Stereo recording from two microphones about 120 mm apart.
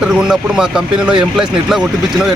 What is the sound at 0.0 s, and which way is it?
Speech, 5° right (ahead or behind).